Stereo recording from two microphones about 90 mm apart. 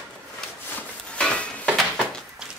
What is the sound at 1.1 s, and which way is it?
Dishes, 10° left (ahead or behind).